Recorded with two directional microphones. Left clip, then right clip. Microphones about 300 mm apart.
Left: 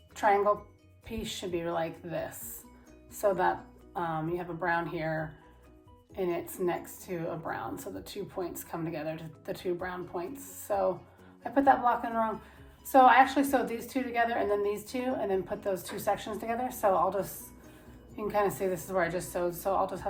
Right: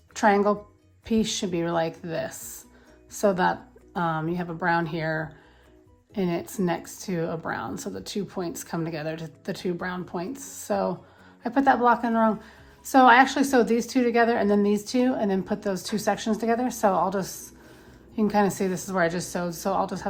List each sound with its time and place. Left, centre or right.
0.1 s a woman's voice: right
6.1 s a woman's voice: right